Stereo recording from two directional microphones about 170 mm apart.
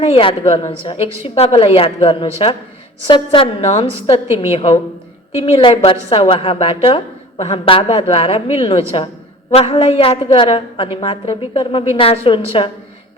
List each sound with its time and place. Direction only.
0.0 s a woman's voice: 35° left (ahead or behind)